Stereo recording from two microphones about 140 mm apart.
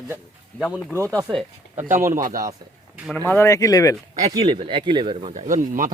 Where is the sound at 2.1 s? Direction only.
70° right (ahead or behind).